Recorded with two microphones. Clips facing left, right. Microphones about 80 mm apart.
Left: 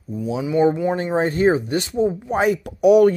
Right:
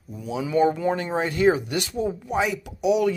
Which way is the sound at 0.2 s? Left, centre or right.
Left.